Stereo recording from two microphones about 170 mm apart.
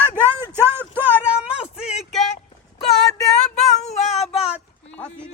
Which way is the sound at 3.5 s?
40° left (ahead or behind).